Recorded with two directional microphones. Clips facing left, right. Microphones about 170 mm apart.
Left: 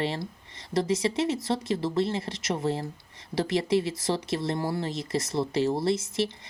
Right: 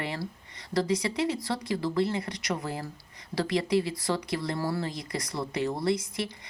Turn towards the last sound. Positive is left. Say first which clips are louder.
# left 5 dB
turn(degrees=25)  # may be behind; listen again after turning